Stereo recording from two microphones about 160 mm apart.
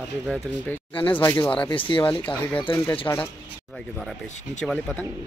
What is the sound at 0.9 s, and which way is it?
Speech, 30° left (ahead or behind).